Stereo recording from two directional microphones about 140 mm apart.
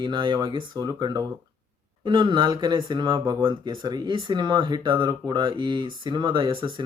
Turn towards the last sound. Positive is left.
turn(degrees=-35)  # may be behind; listen again after turning